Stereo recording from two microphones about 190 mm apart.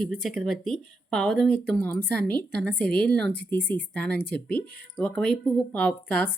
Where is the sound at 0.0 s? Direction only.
5° left (ahead or behind).